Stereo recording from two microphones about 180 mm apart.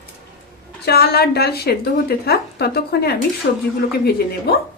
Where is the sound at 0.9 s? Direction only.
60° left (ahead or behind).